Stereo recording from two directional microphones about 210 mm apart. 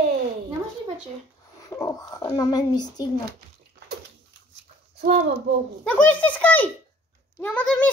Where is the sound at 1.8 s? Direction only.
15° left (ahead or behind).